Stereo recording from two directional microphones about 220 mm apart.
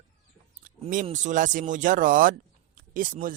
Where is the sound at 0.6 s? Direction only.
35° right (ahead or behind).